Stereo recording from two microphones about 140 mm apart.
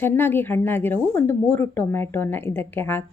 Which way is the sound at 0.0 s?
15° left (ahead or behind).